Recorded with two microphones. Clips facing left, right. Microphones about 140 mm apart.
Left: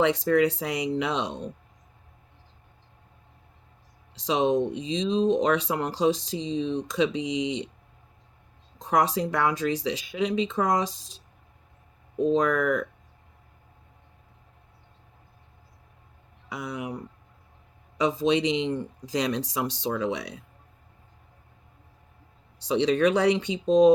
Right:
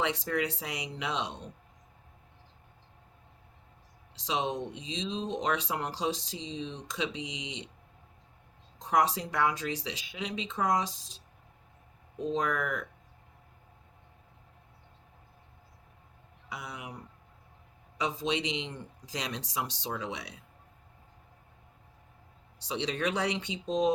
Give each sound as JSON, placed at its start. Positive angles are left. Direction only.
{"t": 0.0, "sound": "speech", "side_deg": 50}
{"t": 4.3, "sound": "speech", "side_deg": 50}
{"t": 8.9, "sound": "speech", "side_deg": 50}
{"t": 12.3, "sound": "speech", "side_deg": 60}
{"t": 16.5, "sound": "speech", "side_deg": 55}
{"t": 22.6, "sound": "speech", "side_deg": 55}